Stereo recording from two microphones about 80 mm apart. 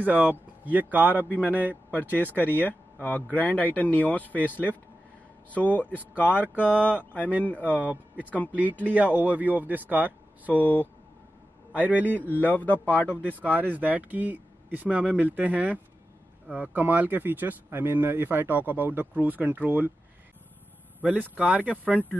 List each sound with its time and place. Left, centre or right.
0.0 s speech: right
1.9 s speech: left
6.7 s speech: centre
7.1 s speech: centre
7.8 s speech: centre
10.5 s speech: left
11.7 s a man's voice: centre
12.3 s speech: left
13.4 s speech: right
21.0 s speech: centre